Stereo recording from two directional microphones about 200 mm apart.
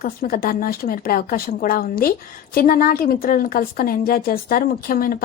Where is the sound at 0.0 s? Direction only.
45° left (ahead or behind).